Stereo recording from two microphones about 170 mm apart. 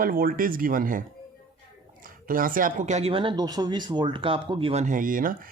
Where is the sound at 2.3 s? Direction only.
55° right (ahead or behind); by 4.8 s 30° right (ahead or behind).